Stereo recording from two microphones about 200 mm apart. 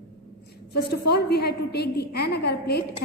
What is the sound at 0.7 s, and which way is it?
A woman's voice, 55° left (ahead or behind).